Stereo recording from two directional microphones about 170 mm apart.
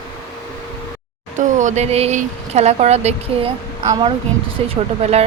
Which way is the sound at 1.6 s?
45° right (ahead or behind).